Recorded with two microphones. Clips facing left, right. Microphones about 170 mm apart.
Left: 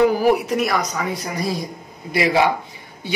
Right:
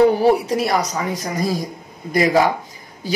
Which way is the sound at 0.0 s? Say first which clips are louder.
Right 2 dB; 30° right (ahead or behind).